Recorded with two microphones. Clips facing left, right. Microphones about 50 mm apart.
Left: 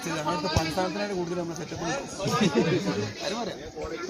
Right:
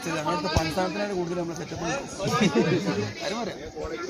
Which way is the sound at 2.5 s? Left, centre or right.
Centre.